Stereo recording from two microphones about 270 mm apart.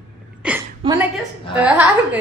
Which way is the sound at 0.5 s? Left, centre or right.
Centre.